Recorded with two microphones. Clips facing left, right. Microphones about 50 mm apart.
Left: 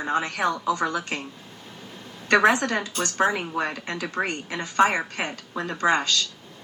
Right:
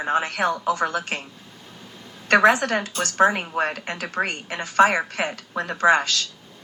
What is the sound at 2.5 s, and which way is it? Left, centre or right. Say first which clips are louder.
Speech: right 2 dB; right.